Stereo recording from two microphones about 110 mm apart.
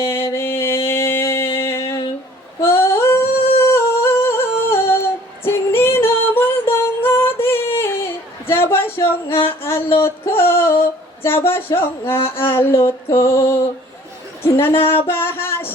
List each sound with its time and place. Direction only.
0.0 s music: 20° left (ahead or behind)
2.6 s female singing: 20° left (ahead or behind)
3.6 s humming: 25° left (ahead or behind)
7.4 s a sound: 20° left (ahead or behind)
12.4 s mantra: 20° left (ahead or behind)
14.8 s music: 20° left (ahead or behind)